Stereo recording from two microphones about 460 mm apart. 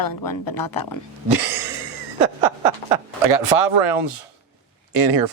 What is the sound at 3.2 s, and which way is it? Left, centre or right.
Speech, right.